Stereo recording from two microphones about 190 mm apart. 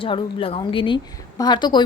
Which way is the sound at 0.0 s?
30° left (ahead or behind).